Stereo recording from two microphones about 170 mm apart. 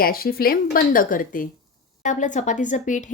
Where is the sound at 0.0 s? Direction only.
60° left (ahead or behind).